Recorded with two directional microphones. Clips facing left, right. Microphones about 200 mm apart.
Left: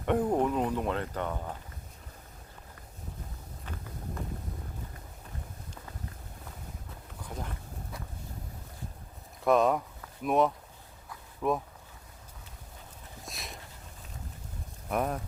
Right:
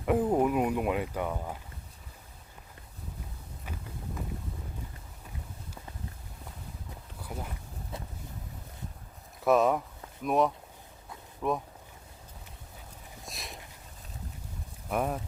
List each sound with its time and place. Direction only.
0.0 s speech: 5° right (ahead or behind)
7.2 s a sound: 10° right (ahead or behind)
7.9 s boat: 25° right (ahead or behind)
9.4 s speech: centre (ahead or behind)
13.2 s a sound: centre (ahead or behind)
14.8 s speech: centre (ahead or behind)